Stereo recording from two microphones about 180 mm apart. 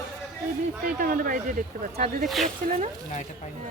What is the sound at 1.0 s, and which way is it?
Speech, 50° right (ahead or behind).